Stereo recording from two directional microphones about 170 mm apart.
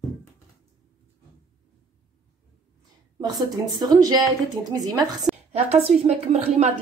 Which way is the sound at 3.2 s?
25° right (ahead or behind).